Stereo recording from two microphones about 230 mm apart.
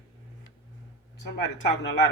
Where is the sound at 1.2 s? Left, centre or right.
Left.